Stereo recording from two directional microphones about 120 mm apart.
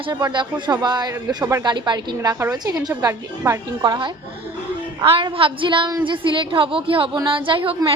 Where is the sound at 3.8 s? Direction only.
40° right (ahead or behind).